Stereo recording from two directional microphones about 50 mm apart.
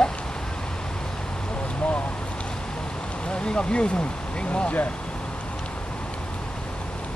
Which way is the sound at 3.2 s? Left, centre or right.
Centre.